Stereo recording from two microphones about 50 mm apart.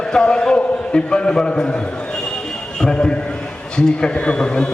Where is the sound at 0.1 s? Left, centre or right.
Centre.